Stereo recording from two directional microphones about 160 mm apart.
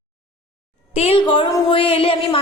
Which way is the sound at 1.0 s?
35° left (ahead or behind).